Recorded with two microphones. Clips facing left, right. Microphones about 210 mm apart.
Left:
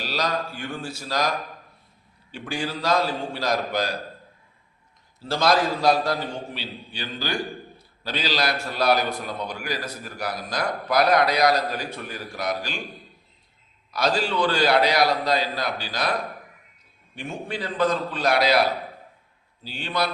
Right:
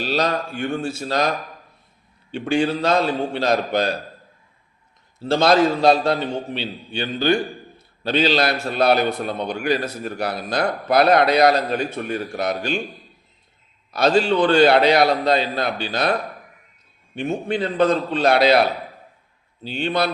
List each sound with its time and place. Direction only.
0.0 s speech: 25° right (ahead or behind)
2.5 s speech: 25° right (ahead or behind)
5.3 s a man's voice: 25° right (ahead or behind)
13.9 s speech: 25° right (ahead or behind)
17.2 s speech: 25° right (ahead or behind)